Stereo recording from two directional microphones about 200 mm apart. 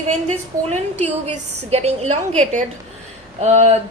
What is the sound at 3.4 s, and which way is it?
Speech, 35° right (ahead or behind).